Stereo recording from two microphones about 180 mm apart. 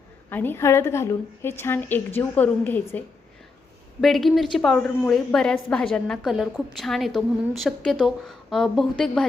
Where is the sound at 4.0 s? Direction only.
Centre (ahead or behind).